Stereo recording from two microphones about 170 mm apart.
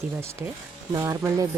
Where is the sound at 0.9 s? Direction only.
20° right (ahead or behind).